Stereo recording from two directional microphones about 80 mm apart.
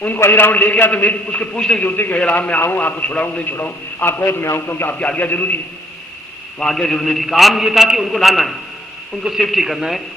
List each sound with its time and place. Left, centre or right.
0.2 s a man's voice: left
4.0 s a man's voice: left
6.6 s a man's voice: centre